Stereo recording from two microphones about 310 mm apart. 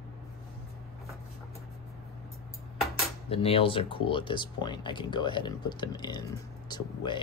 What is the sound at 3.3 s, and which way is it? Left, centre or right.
Speech, centre.